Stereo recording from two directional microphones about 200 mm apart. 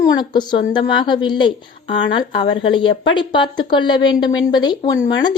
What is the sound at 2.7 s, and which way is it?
A woman's voice, 25° left (ahead or behind).